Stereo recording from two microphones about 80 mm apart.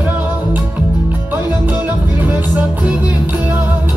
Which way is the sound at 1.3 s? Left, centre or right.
Right.